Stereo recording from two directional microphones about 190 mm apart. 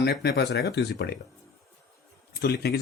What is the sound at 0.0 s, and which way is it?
Speech, 60° left (ahead or behind).